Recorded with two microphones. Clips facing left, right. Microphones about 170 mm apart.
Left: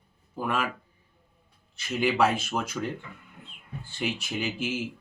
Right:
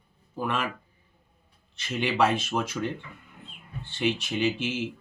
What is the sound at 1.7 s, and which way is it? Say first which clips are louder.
Speech: left 2 dB; 5° left (ahead or behind).